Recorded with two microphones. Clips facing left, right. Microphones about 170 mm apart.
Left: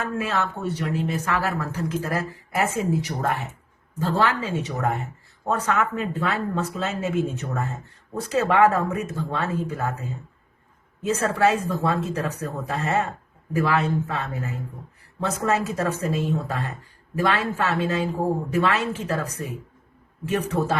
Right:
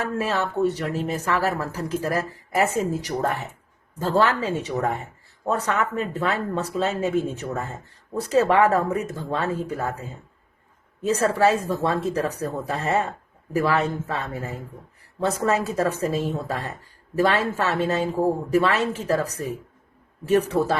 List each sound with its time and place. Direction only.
0.2 s speech: 35° right (ahead or behind)